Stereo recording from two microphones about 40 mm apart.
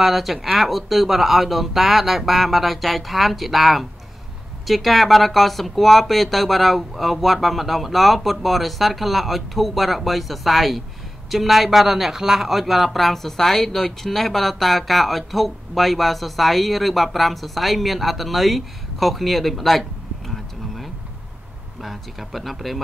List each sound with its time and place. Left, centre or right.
0.0 s a man's voice: centre